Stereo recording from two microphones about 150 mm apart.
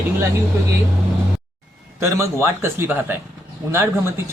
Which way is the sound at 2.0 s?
15° right (ahead or behind).